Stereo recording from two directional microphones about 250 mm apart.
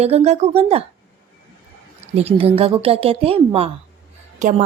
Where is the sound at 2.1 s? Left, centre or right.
Right.